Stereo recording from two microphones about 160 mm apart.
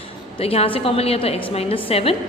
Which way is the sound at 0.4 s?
35° left (ahead or behind).